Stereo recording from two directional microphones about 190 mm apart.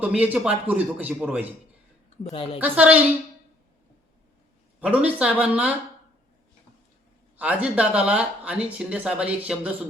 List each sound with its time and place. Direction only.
0.0 s speech: 10° right (ahead or behind)
2.3 s a woman's voice: 30° left (ahead or behind)
2.6 s speech: 10° right (ahead or behind)
4.8 s speech: 5° right (ahead or behind)
7.3 s speech: 5° right (ahead or behind)